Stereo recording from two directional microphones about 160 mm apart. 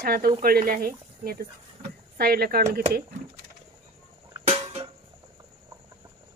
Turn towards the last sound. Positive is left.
turn(degrees=-35)  # may be behind; listen again after turning